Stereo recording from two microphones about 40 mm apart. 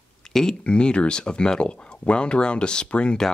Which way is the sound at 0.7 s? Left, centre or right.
Left.